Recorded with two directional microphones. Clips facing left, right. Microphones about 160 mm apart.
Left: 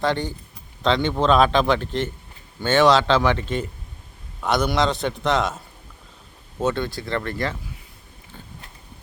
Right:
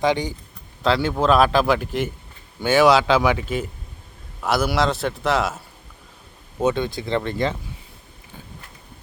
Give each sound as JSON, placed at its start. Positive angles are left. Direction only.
{"t": 0.0, "sound": "a man's voice", "side_deg": -15}
{"t": 6.6, "sound": "speech", "side_deg": -15}